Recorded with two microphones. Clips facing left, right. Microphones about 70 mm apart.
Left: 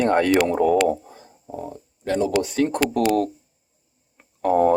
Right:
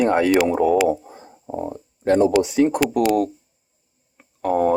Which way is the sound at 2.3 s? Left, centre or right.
Centre.